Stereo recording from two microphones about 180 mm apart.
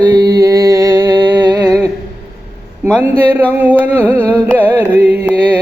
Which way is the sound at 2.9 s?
10° right (ahead or behind).